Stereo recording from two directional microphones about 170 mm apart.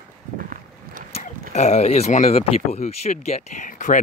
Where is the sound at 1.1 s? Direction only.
40° left (ahead or behind).